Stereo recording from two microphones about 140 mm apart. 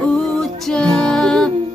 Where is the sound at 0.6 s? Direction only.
5° left (ahead or behind).